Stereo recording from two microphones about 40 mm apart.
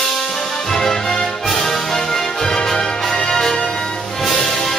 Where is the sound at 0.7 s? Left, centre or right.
Centre.